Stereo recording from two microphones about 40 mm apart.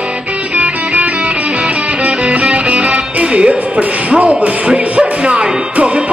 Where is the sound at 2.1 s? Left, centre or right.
Right.